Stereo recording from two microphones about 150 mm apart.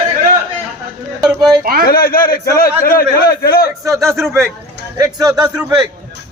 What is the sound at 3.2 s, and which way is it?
Speech, 90° left.